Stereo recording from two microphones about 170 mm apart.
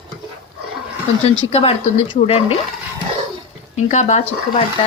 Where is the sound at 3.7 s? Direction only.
45° left (ahead or behind).